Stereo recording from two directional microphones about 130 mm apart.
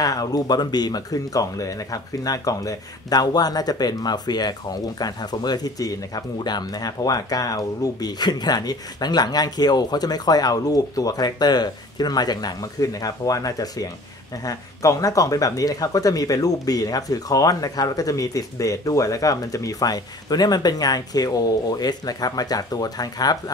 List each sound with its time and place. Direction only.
0.0 s speech: 30° left (ahead or behind)